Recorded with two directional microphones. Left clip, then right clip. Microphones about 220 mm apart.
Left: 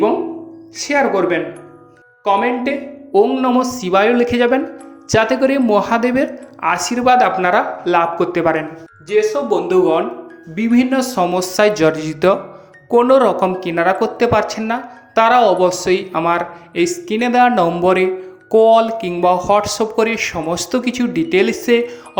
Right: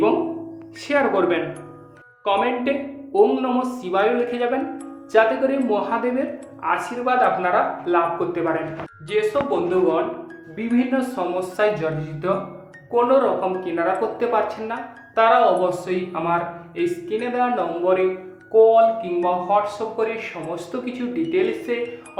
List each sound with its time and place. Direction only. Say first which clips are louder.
0.9 s speech: left 4 dB; 30° left (ahead or behind); by 22.2 s 50° left (ahead or behind)